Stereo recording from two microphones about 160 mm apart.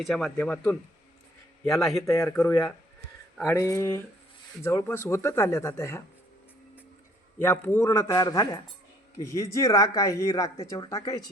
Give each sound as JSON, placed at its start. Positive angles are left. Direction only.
{"t": 0.0, "sound": "speech", "side_deg": 0}
{"t": 2.0, "sound": "a man's voice", "side_deg": 20}
{"t": 7.3, "sound": "a man's voice", "side_deg": 15}